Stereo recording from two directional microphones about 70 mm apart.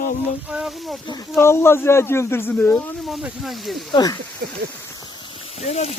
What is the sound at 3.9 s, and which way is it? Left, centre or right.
Speech, left.